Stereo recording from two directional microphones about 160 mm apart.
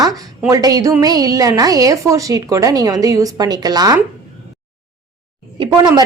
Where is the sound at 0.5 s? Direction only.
20° right (ahead or behind).